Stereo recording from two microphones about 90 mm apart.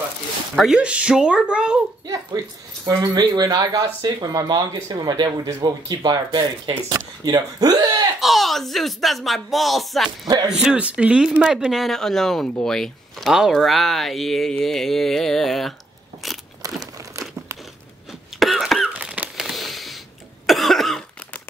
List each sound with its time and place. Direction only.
0.6 s speech: 10° right (ahead or behind)
2.8 s speech: 45° right (ahead or behind)
8.2 s speech: centre (ahead or behind)
16.6 s crumpling: 40° right (ahead or behind)
18.4 s cough: centre (ahead or behind)
18.9 s a sound: 15° right (ahead or behind)
19.3 s a sound: centre (ahead or behind)
20.4 s cough: centre (ahead or behind)